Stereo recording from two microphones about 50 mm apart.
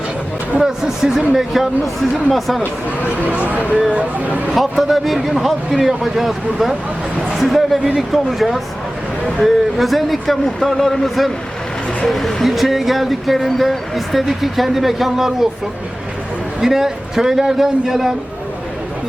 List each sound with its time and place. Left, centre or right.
0.6 s a man's voice: centre
3.2 s speech: right
4.8 s speech: centre
16.6 s a man's voice: centre